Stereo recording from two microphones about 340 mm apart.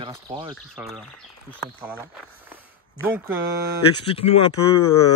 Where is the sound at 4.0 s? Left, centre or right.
Centre.